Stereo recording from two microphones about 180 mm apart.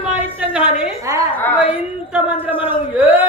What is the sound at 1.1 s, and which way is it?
A man's voice, 20° right (ahead or behind).